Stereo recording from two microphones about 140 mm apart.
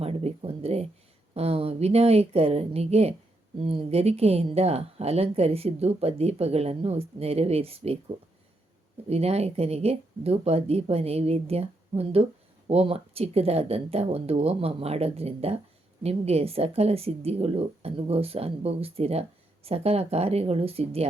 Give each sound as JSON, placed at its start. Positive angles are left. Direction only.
{"t": 0.0, "sound": "a sound", "side_deg": -50}
{"t": 1.3, "sound": "a woman's voice", "side_deg": -45}
{"t": 9.0, "sound": "a woman's voice", "side_deg": -45}